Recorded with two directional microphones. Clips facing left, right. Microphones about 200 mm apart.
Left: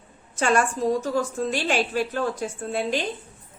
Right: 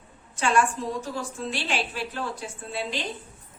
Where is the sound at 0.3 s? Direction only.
45° left (ahead or behind).